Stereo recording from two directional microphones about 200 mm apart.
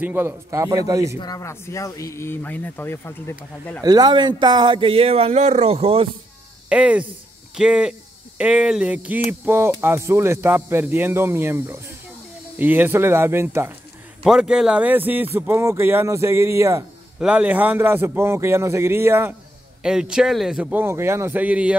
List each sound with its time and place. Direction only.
0.0 s speech: 10° right (ahead or behind)
1.1 s speech: 20° left (ahead or behind)
3.8 s speech: 20° right (ahead or behind)
6.7 s speech: 5° right (ahead or behind)